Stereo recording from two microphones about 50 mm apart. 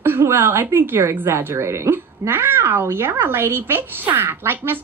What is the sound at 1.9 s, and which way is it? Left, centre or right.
A woman's voice, right.